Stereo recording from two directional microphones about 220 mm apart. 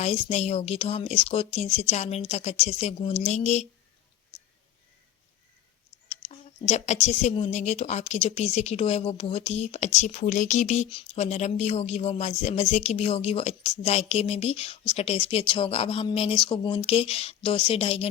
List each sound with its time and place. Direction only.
0.0 s speech: 30° left (ahead or behind)
4.3 s whispering: 25° left (ahead or behind)
6.1 s speech: 30° left (ahead or behind)